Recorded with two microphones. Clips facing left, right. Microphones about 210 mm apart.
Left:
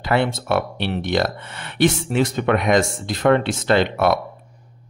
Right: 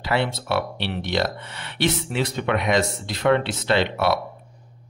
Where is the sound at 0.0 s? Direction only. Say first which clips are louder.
Left 4 dB; 50° left (ahead or behind).